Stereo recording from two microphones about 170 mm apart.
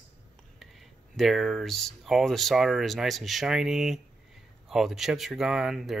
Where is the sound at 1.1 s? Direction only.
Centre (ahead or behind).